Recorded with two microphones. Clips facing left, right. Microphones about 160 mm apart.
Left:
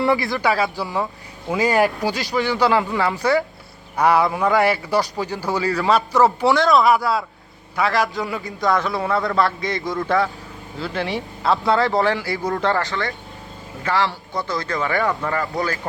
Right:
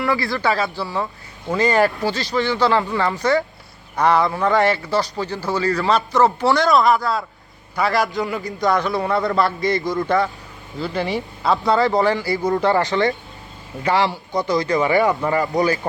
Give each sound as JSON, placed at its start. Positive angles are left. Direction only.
{"t": 0.0, "sound": "a man's voice", "side_deg": 20}
{"t": 12.7, "sound": "speech", "side_deg": -20}